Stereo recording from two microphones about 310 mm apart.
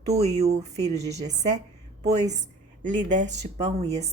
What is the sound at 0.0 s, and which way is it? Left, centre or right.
Speech, centre.